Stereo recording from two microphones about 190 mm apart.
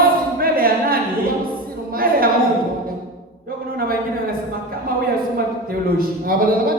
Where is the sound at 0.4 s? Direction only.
50° right (ahead or behind).